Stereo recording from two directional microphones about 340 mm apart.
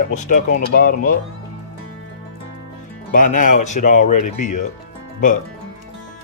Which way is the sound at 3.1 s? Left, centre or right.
Left.